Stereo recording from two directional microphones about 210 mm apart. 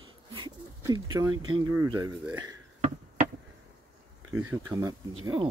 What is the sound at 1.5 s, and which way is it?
Speech, 25° right (ahead or behind).